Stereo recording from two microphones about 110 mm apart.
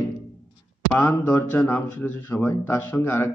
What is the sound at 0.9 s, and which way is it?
Speech, 15° left (ahead or behind).